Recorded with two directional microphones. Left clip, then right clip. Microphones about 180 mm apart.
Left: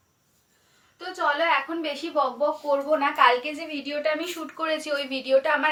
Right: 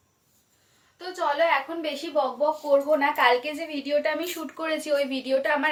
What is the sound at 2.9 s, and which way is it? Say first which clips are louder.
Speech: left 5 dB; 25° right (ahead or behind).